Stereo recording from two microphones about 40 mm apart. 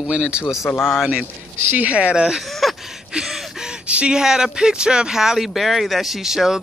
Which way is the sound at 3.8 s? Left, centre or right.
Right.